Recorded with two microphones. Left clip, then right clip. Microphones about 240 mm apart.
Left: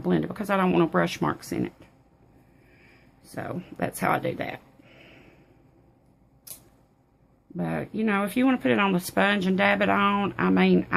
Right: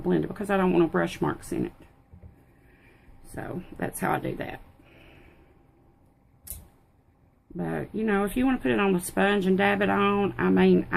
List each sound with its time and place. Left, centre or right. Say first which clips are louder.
0.0 s speech: even; left
3.3 s speech: left 2 dB; left
7.5 s speech: left 1 dB; left